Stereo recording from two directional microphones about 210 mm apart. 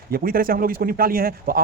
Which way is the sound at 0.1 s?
45° right (ahead or behind).